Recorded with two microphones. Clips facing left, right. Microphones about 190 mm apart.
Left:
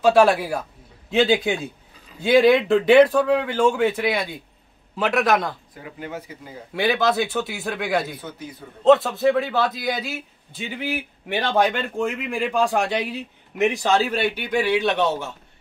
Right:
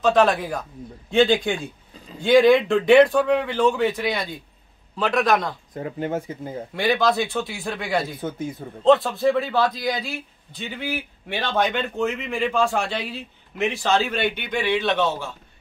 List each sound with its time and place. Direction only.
0.0 s a man's voice: 10° left (ahead or behind)
5.8 s speech: 40° right (ahead or behind)
6.7 s speech: 5° left (ahead or behind)
8.2 s speech: 50° right (ahead or behind)
8.8 s speech: centre (ahead or behind)
11.3 s a man's voice: 10° left (ahead or behind)